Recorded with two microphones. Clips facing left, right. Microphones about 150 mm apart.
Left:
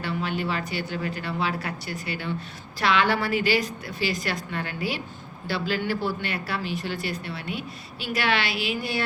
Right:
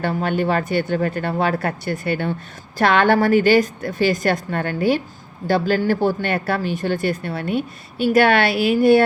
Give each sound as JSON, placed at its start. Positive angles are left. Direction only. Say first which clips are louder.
{"t": 0.0, "sound": "speech", "louder": "right 8 dB", "side_deg": -50}